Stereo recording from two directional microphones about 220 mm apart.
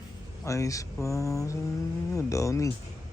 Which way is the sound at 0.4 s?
15° left (ahead or behind).